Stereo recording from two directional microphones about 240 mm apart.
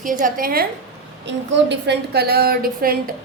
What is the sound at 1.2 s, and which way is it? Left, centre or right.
A woman's voice, right.